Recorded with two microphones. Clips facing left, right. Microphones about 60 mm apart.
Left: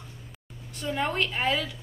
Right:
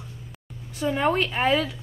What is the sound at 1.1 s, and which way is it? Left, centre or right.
Speech, centre.